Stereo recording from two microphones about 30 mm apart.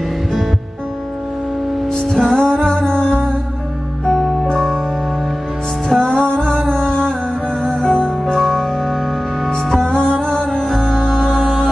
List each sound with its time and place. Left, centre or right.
2.0 s music: left
4.0 s music: centre
5.9 s music: left
8.4 s music: centre
9.8 s music: left; by 11.7 s centre